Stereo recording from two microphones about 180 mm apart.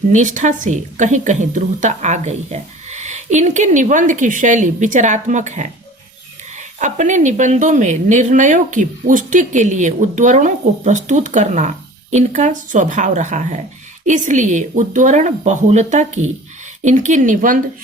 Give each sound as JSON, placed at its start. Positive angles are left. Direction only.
{"t": 0.1, "sound": "a woman's voice", "side_deg": -40}